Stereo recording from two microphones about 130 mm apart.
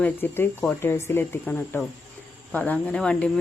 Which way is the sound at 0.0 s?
15° left (ahead or behind).